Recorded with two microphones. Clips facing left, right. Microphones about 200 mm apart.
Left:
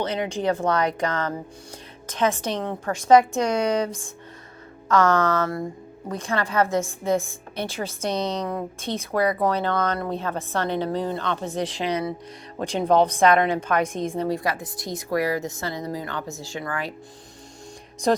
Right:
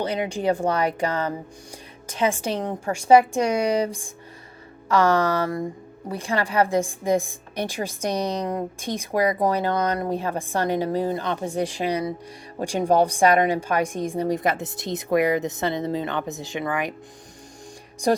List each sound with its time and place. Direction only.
0.0 s a woman's voice: 10° right (ahead or behind)